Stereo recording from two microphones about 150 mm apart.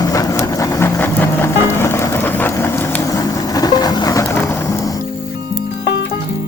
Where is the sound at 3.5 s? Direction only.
25° left (ahead or behind).